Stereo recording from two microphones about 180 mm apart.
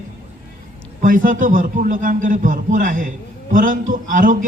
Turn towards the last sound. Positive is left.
turn(degrees=-45)  # may be behind; listen again after turning